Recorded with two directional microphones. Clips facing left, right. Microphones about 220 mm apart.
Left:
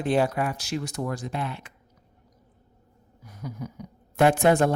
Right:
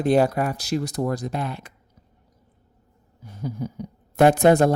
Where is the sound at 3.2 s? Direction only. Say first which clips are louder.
Right 6 dB; 30° right (ahead or behind).